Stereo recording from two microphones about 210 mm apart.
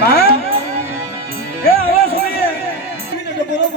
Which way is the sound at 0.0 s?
50° left (ahead or behind).